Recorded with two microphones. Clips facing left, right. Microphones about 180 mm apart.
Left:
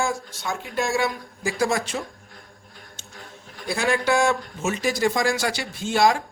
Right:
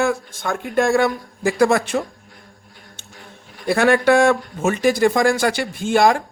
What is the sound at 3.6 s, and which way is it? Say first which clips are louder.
Speech: right 8 dB; 60° right (ahead or behind).